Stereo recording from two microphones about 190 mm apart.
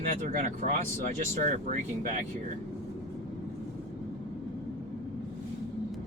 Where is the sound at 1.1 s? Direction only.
40° right (ahead or behind).